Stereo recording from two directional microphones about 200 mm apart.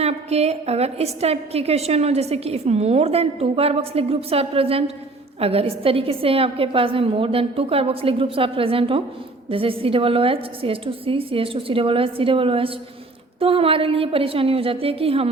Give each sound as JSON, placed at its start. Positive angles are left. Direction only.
{"t": 0.0, "sound": "a woman's voice", "side_deg": -30}